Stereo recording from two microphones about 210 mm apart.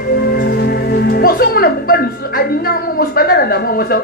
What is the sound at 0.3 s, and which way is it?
Speech, 50° left (ahead or behind).